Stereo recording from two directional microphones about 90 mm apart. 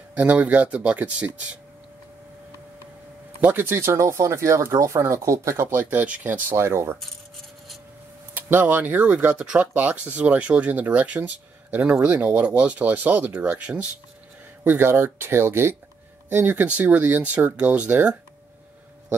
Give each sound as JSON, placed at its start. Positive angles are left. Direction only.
{"t": 0.1, "sound": "speech", "side_deg": -15}
{"t": 3.3, "sound": "speech", "side_deg": -20}
{"t": 6.5, "sound": "speech", "side_deg": -30}
{"t": 8.4, "sound": "speech", "side_deg": -20}